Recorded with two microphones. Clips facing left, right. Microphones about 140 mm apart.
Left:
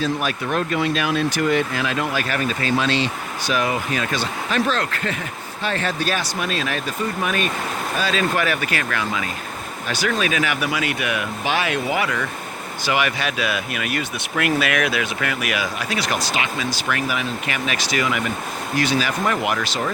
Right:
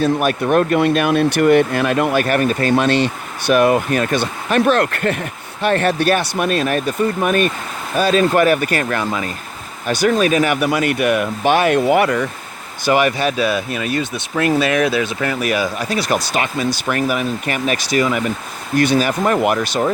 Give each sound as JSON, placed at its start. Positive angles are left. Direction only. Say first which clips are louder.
{"t": 0.0, "sound": "speech", "louder": "right 7 dB", "side_deg": -55}